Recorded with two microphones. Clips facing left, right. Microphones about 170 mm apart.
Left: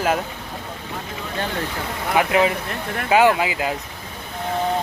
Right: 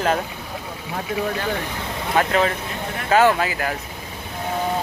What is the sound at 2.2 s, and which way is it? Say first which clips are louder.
Speech: left 2 dB; 15° left (ahead or behind).